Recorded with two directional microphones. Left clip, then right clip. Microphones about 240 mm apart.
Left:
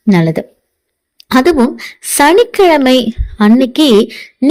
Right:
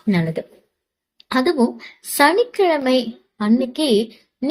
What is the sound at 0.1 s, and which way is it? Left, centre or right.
Speech, left.